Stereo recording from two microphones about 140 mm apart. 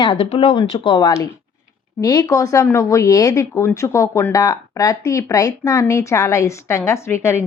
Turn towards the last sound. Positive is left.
turn(degrees=20)  # may be behind; listen again after turning